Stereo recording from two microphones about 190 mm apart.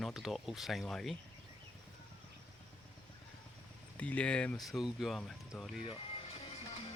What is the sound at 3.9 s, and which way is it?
Speech, 5° left (ahead or behind).